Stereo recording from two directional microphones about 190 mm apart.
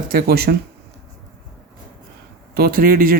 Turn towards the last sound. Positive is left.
turn(degrees=-50)  # may be behind; listen again after turning